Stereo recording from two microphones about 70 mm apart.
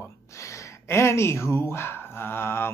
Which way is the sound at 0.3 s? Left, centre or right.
Left.